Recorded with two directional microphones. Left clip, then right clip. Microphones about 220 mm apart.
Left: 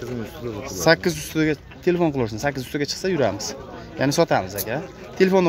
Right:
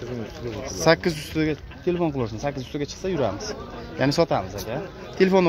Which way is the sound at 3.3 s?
40° left (ahead or behind).